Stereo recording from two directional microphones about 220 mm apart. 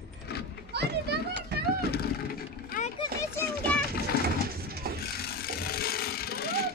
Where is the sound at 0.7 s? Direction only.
50° right (ahead or behind).